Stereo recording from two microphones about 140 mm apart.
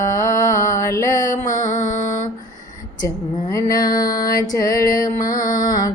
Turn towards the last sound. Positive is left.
turn(degrees=25)  # may be behind; listen again after turning